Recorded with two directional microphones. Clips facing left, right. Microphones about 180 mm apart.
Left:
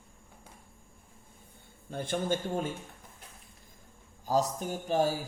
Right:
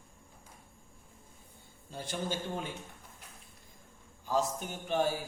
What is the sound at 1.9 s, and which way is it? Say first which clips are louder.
Speech: left 5 dB; 55° left (ahead or behind).